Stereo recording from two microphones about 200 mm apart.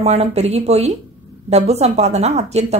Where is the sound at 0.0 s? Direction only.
30° right (ahead or behind).